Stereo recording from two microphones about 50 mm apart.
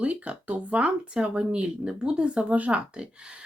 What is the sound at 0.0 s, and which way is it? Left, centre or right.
Speech, right.